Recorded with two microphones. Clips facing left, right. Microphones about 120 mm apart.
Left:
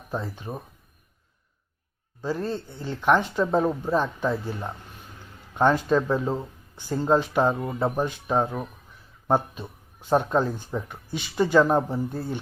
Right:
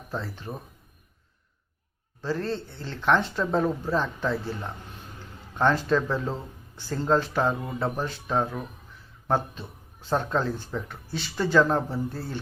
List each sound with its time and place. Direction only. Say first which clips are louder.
0.1 s speech: left 2 dB; 15° left (ahead or behind)
2.2 s speech: left 1 dB; 10° left (ahead or behind)